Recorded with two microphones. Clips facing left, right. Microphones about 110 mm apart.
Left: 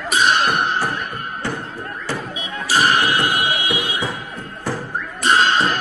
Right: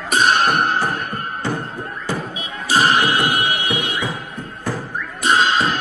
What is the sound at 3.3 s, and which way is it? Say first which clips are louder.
Music: even; 15° left (ahead or behind).